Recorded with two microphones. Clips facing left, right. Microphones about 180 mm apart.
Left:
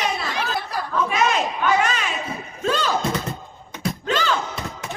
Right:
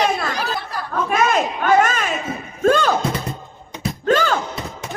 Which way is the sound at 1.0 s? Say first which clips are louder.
Right 5 dB; 45° right (ahead or behind).